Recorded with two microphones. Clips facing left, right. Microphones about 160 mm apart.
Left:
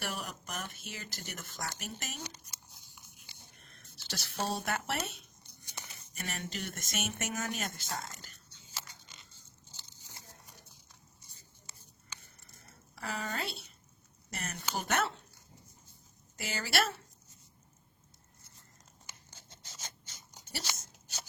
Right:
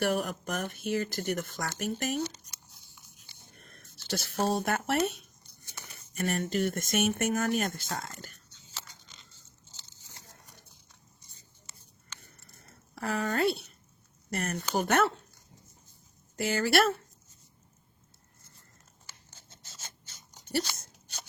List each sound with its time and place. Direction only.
0.0 s speech: 50° right (ahead or behind)
2.2 s tearing: 10° left (ahead or behind)
3.5 s speech: 50° right (ahead or behind)
5.6 s a sound: 15° left (ahead or behind)
6.1 s speech: 50° right (ahead or behind)
8.5 s biting: 10° left (ahead or behind)
13.0 s speech: 55° right (ahead or behind)
16.4 s speech: 50° right (ahead or behind)
19.0 s a sound: 15° left (ahead or behind)